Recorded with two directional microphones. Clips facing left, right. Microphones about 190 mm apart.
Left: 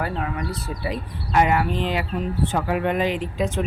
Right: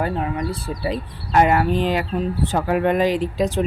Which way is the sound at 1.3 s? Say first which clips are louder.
Right 3 dB; 45° right (ahead or behind).